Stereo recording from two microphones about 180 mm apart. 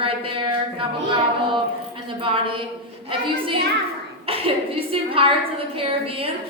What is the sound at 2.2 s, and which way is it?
Speech, 30° right (ahead or behind).